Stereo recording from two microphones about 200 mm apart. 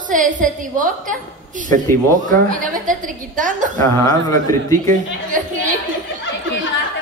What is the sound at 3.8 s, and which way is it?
Speech, 15° left (ahead or behind).